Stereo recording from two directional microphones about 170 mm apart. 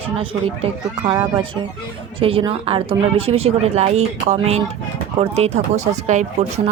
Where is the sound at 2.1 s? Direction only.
30° right (ahead or behind).